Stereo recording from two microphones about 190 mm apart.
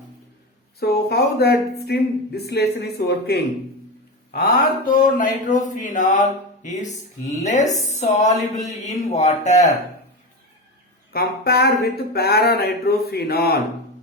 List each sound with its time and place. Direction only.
0.8 s a woman's voice: 55° left (ahead or behind); by 9.6 s 35° left (ahead or behind)
11.1 s speech: 55° left (ahead or behind)